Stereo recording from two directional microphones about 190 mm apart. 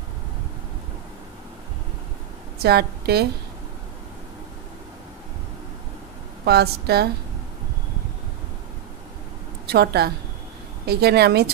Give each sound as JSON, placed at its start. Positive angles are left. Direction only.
{"t": 2.6, "sound": "a woman's voice", "side_deg": -55}
{"t": 6.4, "sound": "a woman's voice", "side_deg": -55}
{"t": 9.7, "sound": "a woman's voice", "side_deg": -55}